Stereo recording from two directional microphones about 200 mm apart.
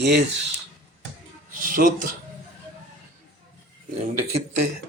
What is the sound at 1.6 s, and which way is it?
Speech, 40° right (ahead or behind).